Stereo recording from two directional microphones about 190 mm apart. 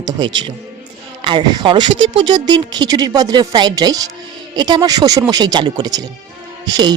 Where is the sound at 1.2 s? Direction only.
25° right (ahead or behind).